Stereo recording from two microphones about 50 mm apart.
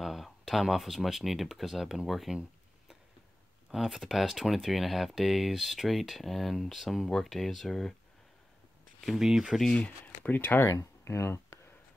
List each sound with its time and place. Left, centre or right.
0.0 s speech: centre
3.7 s speech: centre
9.0 s speech: centre
9.8 s speech: left
10.6 s speech: left